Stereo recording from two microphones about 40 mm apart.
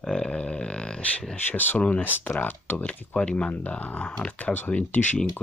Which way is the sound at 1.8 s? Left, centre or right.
Left.